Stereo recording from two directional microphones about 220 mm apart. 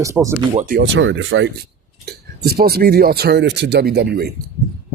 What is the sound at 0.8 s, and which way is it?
Speech, 55° right (ahead or behind).